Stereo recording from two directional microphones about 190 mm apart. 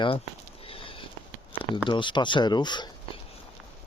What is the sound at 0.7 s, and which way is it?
Sniff, 30° left (ahead or behind).